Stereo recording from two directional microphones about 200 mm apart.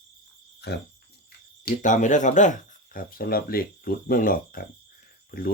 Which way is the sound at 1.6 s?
40° left (ahead or behind).